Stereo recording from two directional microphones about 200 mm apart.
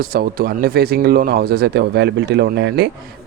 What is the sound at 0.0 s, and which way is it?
Speech, 50° right (ahead or behind).